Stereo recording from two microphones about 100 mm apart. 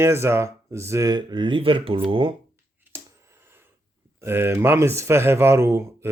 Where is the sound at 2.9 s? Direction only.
25° right (ahead or behind).